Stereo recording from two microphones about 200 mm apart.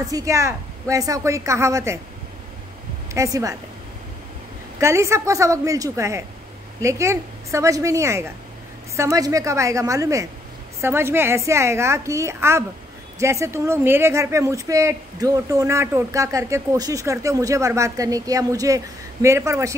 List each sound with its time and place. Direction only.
0.0 s a woman's voice: 15° right (ahead or behind)
3.2 s a woman's voice: 15° right (ahead or behind)
4.7 s a woman's voice: 15° right (ahead or behind)